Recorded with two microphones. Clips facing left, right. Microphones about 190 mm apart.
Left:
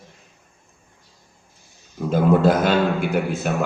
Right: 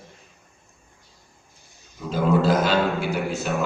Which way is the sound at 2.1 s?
55° left (ahead or behind).